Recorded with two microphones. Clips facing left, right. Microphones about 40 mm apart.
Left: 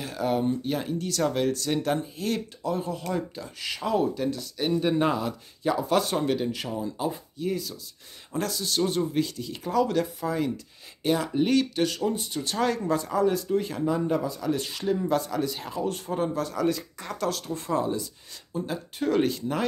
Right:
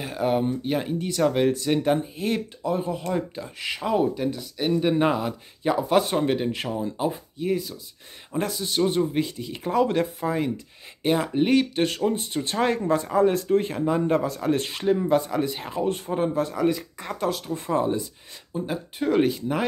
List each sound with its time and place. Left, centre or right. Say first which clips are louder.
0.0 s speech: right 2 dB; right
18.5 s speech: right 2 dB; centre